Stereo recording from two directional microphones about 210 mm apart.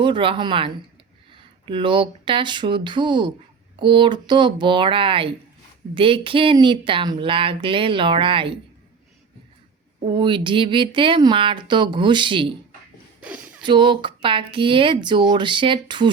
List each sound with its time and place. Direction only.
0.0 s speech: 25° right (ahead or behind)
10.0 s speech: 25° right (ahead or behind)
13.2 s a sound: 5° right (ahead or behind)
13.7 s speech: 20° right (ahead or behind)